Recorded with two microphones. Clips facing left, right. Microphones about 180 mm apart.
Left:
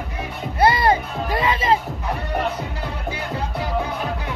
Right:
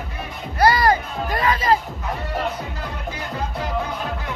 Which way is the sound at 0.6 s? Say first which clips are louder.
Even; 25° left (ahead or behind).